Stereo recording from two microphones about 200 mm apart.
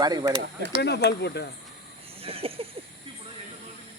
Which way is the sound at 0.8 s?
55° left (ahead or behind).